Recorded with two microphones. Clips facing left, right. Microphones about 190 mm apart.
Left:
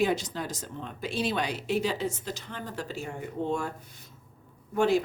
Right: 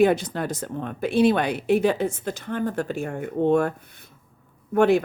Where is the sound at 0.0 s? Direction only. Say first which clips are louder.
Right 8 dB; 55° right (ahead or behind).